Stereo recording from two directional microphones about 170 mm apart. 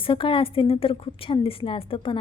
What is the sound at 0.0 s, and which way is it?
A woman's voice, 30° left (ahead or behind).